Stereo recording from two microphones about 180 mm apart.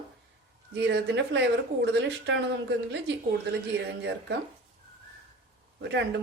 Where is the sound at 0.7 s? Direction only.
70° right (ahead or behind).